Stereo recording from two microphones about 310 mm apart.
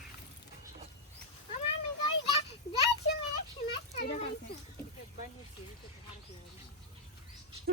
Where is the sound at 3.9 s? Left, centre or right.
Left.